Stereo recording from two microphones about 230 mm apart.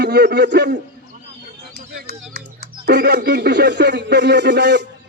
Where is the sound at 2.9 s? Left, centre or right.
Right.